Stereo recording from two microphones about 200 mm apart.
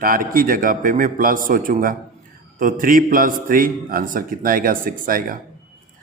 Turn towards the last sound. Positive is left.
turn(degrees=-45)  # may be behind; listen again after turning